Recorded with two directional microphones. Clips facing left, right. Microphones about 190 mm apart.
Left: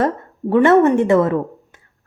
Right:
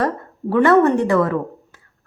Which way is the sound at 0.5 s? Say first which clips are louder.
Left 2 dB; 25° left (ahead or behind).